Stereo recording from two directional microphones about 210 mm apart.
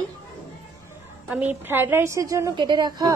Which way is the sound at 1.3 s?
10° right (ahead or behind).